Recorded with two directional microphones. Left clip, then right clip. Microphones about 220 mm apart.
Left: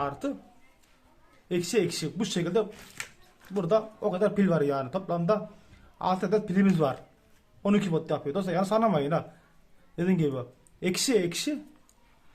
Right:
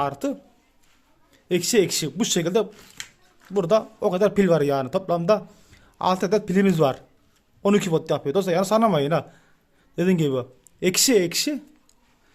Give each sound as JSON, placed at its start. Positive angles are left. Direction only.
{"t": 0.0, "sound": "speech", "side_deg": -40}
{"t": 1.5, "sound": "speech", "side_deg": -40}